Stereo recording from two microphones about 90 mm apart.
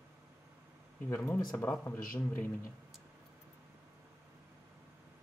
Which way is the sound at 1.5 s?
20° left (ahead or behind).